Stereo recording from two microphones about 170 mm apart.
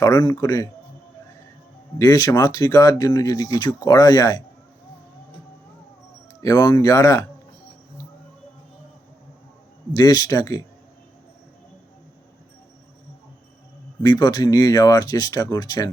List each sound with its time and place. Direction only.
0.0 s speech: 20° left (ahead or behind)
2.0 s speech: 20° left (ahead or behind)
6.4 s speech: 20° left (ahead or behind)
9.9 s speech: 20° left (ahead or behind)
14.0 s speech: 25° left (ahead or behind)